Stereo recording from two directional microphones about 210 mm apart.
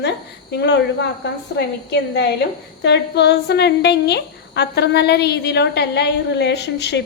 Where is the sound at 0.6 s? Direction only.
55° left (ahead or behind).